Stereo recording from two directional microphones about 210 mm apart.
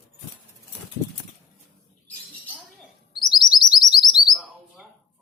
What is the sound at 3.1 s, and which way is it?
Chirp, 20° left (ahead or behind).